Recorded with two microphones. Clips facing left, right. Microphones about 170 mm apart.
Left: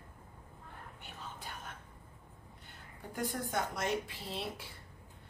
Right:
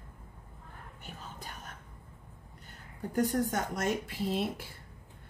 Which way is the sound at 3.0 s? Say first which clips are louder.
Right 9 dB; 45° right (ahead or behind).